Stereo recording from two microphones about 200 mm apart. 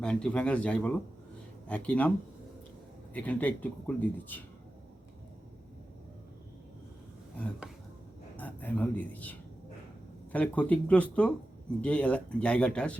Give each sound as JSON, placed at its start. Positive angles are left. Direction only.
{"t": 0.0, "sound": "speech", "side_deg": 5}
{"t": 8.4, "sound": "speech", "side_deg": 10}